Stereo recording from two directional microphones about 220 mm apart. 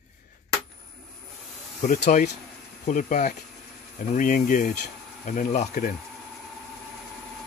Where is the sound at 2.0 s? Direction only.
30° left (ahead or behind).